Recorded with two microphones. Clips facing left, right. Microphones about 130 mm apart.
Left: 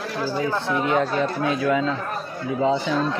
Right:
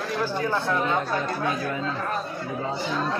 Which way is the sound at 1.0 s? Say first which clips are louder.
Left 4 dB; 90° left.